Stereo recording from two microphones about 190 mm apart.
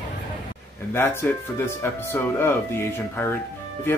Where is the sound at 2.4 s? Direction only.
15° left (ahead or behind).